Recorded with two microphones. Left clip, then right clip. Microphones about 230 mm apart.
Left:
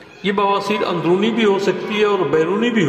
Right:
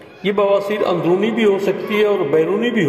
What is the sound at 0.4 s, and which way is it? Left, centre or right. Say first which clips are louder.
A man's voice: right 2 dB; left.